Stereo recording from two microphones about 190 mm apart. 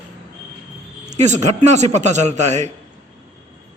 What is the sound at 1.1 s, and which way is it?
A man's voice, 40° right (ahead or behind).